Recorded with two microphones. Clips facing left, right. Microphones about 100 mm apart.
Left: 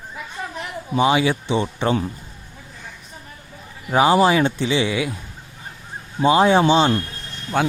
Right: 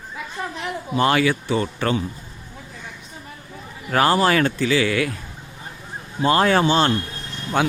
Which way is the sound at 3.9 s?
10° left (ahead or behind).